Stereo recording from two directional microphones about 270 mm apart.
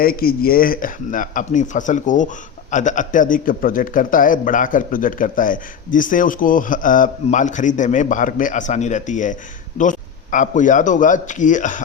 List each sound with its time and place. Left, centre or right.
0.0 s a man's voice: left